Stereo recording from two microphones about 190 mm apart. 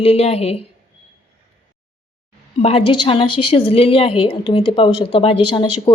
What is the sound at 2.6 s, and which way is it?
A woman's voice, 30° left (ahead or behind).